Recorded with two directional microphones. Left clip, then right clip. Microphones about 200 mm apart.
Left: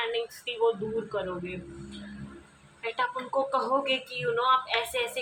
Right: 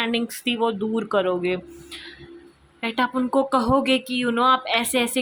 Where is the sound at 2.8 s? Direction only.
50° right (ahead or behind).